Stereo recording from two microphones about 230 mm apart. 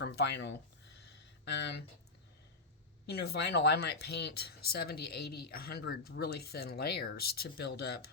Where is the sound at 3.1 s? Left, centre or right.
Left.